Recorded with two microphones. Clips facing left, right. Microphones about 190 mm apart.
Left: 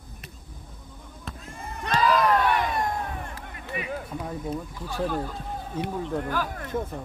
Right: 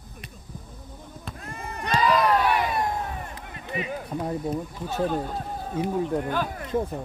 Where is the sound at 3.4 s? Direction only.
25° right (ahead or behind).